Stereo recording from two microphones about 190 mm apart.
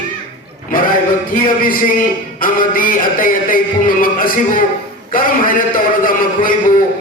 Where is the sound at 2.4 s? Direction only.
45° left (ahead or behind).